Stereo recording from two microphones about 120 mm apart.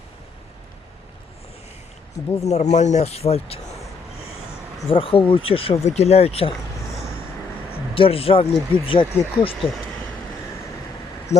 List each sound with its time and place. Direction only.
2.4 s speech: 65° left (ahead or behind)
4.9 s speech: 50° left (ahead or behind)
5.8 s speech: 65° left (ahead or behind)
7.7 s speech: 50° left (ahead or behind)
11.3 s speech: 70° left (ahead or behind)